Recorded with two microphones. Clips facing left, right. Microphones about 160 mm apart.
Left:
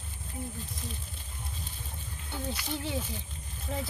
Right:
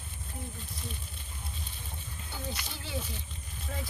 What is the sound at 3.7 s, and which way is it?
Speech, 25° left (ahead or behind).